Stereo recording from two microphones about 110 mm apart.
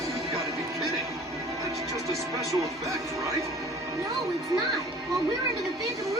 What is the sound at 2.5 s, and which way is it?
Speech, 30° right (ahead or behind).